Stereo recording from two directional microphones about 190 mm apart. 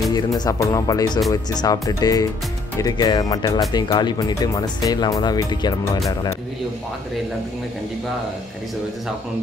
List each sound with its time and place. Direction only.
0.1 s speech: 15° left (ahead or behind)